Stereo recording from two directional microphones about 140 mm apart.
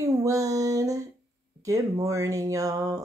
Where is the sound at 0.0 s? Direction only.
20° right (ahead or behind).